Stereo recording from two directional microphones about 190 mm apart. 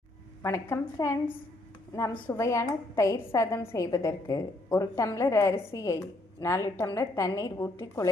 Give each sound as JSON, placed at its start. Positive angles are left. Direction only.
{"t": 0.4, "sound": "a woman's voice", "side_deg": 15}